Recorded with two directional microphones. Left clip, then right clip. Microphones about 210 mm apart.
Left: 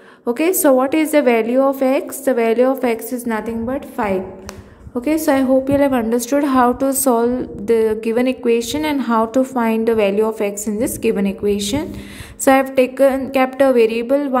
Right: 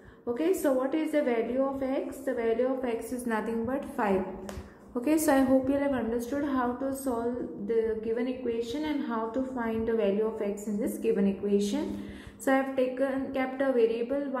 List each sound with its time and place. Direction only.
0.2 s a woman's voice: 50° left (ahead or behind); by 5.8 s 25° left (ahead or behind)
5.8 s a woman's voice: 40° left (ahead or behind)